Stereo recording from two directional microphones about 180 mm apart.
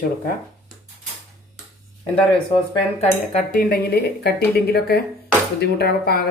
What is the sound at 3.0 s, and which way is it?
Speech, 45° left (ahead or behind).